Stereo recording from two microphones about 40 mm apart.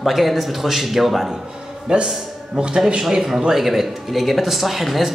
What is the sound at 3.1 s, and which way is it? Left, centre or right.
A man's voice, centre.